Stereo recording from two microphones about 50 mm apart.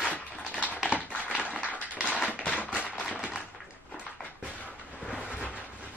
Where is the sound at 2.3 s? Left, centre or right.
Left.